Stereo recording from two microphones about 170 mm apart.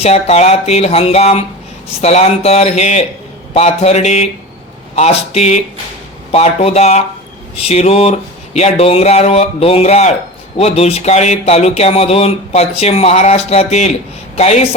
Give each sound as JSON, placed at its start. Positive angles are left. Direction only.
{"t": 0.0, "sound": "speech", "side_deg": 40}